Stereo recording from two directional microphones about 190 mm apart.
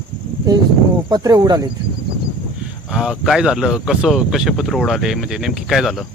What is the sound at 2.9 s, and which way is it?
Speech, centre (ahead or behind).